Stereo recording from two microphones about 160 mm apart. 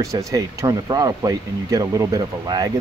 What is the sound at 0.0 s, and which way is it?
Speech, 20° right (ahead or behind).